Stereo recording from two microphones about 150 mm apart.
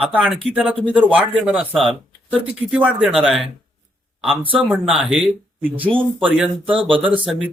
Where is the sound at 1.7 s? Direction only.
5° left (ahead or behind).